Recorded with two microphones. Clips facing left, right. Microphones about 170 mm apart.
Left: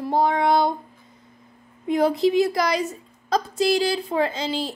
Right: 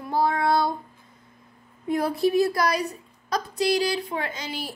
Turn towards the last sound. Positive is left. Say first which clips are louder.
# left 8 dB
turn(degrees=30)  # may be behind; listen again after turning